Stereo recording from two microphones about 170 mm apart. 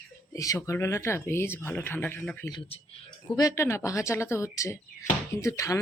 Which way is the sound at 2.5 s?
25° left (ahead or behind).